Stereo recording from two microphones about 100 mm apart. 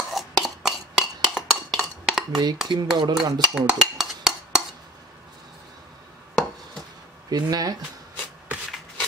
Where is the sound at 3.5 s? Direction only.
10° right (ahead or behind).